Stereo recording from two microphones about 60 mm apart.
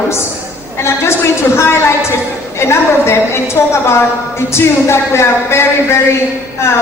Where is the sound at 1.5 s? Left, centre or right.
Left.